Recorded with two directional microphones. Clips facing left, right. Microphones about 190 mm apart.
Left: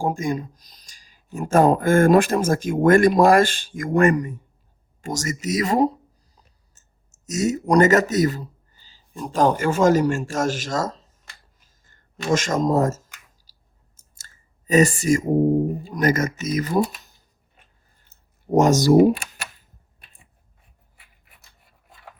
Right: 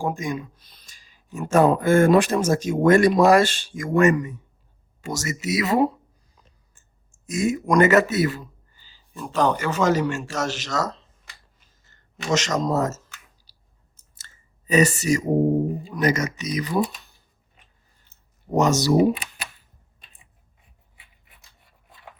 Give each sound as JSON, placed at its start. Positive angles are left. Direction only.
{"t": 0.0, "sound": "speech", "side_deg": 45}
{"t": 13.5, "sound": "chewing", "side_deg": 45}
{"t": 14.7, "sound": "speech", "side_deg": 45}
{"t": 18.1, "sound": "a sound", "side_deg": 50}
{"t": 20.9, "sound": "scratch", "side_deg": 0}